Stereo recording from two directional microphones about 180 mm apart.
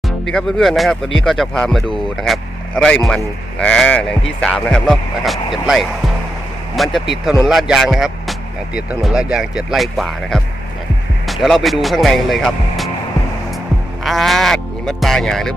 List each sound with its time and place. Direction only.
0.3 s a man's voice: centre (ahead or behind)
11.4 s speech: centre (ahead or behind)
14.0 s speech: centre (ahead or behind)